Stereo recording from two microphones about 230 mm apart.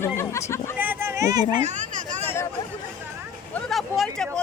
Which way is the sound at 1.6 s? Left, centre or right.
Right.